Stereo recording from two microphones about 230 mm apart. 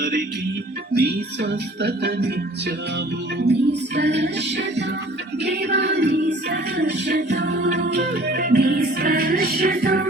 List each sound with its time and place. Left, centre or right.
0.9 s music: right